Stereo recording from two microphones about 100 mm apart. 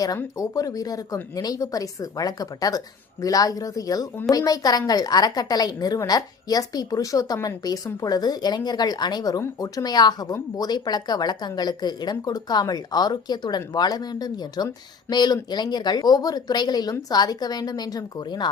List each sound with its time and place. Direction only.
0.3 s a woman's voice: 35° left (ahead or behind)